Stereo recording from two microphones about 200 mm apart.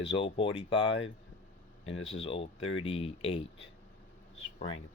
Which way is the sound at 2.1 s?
30° left (ahead or behind).